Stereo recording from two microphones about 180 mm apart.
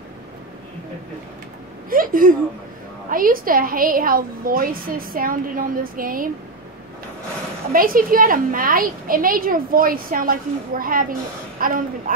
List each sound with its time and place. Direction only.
1.9 s a woman's voice: 50° right (ahead or behind)
7.7 s a woman's voice: 50° right (ahead or behind)